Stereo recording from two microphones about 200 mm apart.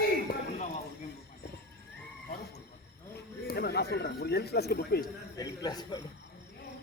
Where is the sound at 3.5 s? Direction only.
50° left (ahead or behind).